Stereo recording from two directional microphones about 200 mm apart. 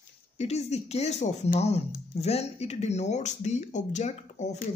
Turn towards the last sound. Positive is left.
turn(degrees=35)  # may be behind; listen again after turning